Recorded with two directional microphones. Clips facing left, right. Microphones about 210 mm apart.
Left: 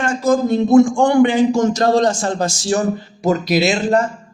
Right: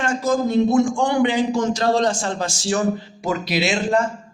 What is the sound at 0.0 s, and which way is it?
A man's voice, 50° left (ahead or behind).